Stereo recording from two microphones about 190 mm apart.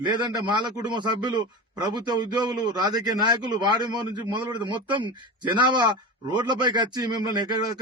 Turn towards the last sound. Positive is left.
turn(degrees=-20)  # may be behind; listen again after turning